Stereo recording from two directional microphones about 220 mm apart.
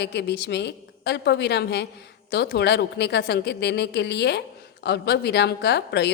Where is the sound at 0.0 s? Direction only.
50° left (ahead or behind).